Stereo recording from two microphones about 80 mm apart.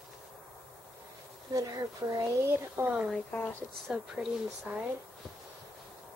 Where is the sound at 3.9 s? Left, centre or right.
Centre.